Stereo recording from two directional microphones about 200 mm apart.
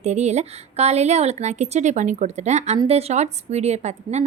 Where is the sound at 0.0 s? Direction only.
35° right (ahead or behind).